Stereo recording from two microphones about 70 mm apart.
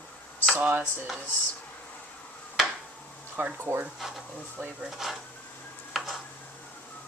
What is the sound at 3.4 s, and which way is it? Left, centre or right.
Speech, right.